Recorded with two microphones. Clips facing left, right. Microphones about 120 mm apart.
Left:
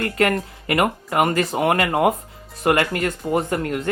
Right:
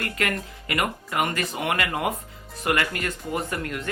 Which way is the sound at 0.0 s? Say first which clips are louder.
Left 8 dB; 35° left (ahead or behind).